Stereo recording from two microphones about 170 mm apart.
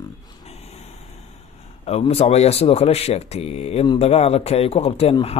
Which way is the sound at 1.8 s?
35° left (ahead or behind).